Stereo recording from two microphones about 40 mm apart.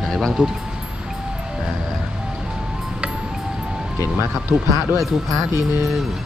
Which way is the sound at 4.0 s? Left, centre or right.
Right.